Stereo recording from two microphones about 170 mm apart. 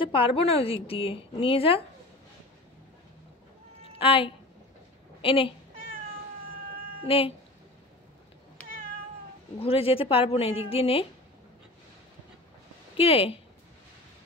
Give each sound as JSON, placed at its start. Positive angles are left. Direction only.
{"t": 0.0, "sound": "a woman's voice", "side_deg": 30}
{"t": 4.0, "sound": "a woman's voice", "side_deg": 30}
{"t": 7.1, "sound": "a woman's voice", "side_deg": 35}
{"t": 9.6, "sound": "a woman's voice", "side_deg": 35}
{"t": 12.9, "sound": "speech", "side_deg": 35}